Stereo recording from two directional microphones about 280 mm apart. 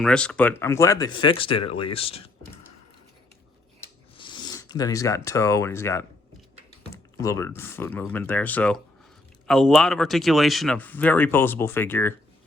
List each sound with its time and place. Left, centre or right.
0.0 s speech: centre
4.2 s speech: centre